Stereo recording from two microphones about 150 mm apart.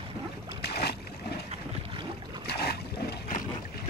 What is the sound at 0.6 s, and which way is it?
Boat, 90° left.